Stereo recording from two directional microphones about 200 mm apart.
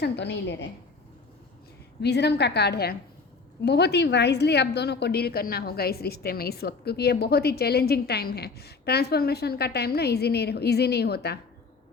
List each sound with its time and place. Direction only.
0.0 s a woman's voice: 60° left (ahead or behind)
2.0 s a woman's voice: 55° left (ahead or behind)